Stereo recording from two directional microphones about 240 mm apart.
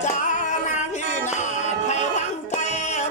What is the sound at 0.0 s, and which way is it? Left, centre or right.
Music, left.